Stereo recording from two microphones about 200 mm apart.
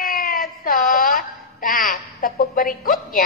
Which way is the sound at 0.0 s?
45° left (ahead or behind).